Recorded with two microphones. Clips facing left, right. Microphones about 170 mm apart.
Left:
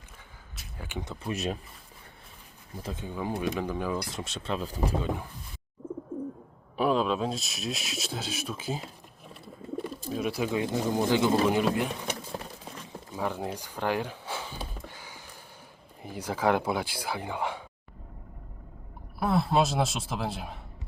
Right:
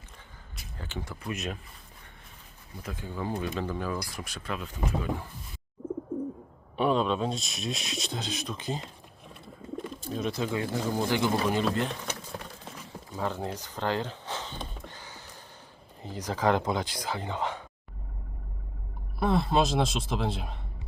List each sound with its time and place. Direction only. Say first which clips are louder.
0.5 s speech: left 1 dB; 10° left (ahead or behind); by 1.5 s 30° left (ahead or behind)
2.8 s speech: left 1 dB; 20° left (ahead or behind)
6.7 s speech: even; centre (ahead or behind); by 11.3 s 20° left (ahead or behind)
11.4 s a sound: left 2 dB; 10° left (ahead or behind)
13.1 s a sound: even; 10° left (ahead or behind)
16.0 s speech: even; 10° left (ahead or behind)
19.2 s speech: even; 5° left (ahead or behind)